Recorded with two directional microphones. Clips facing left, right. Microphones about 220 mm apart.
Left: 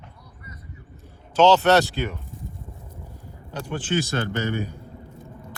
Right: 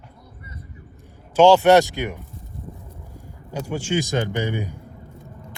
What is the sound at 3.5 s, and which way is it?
A man's voice, 10° right (ahead or behind).